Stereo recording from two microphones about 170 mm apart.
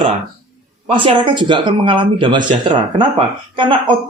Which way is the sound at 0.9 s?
30° right (ahead or behind).